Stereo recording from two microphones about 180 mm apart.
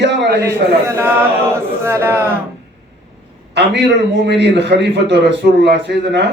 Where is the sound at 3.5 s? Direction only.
70° right (ahead or behind).